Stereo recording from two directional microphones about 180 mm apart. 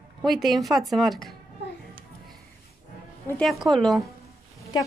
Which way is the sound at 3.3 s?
5° left (ahead or behind).